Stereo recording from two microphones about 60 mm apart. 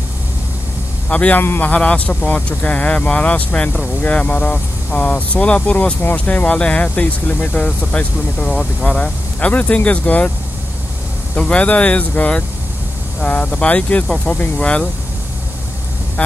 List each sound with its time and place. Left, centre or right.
1.0 s a man's voice: left
1.4 s a man's voice: left
1.7 s speech: left
11.5 s speech: left